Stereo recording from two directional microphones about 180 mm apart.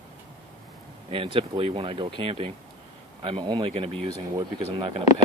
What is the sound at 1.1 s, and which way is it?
Speech, 30° right (ahead or behind).